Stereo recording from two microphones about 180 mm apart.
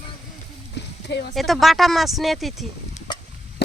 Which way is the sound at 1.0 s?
70° left (ahead or behind).